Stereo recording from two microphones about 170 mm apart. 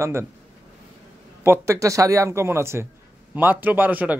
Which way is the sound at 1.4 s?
15° right (ahead or behind).